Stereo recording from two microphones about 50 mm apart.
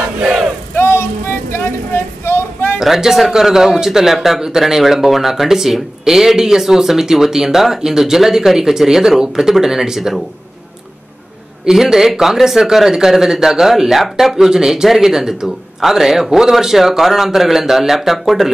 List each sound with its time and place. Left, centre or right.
0.7 s music: left
1.5 s vehicle: left
2.8 s speech: centre
11.6 s speech: centre